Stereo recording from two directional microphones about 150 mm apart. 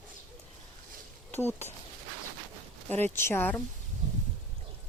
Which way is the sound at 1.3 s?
15° left (ahead or behind).